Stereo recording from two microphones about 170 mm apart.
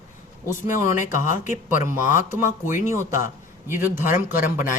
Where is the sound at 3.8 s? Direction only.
10° right (ahead or behind).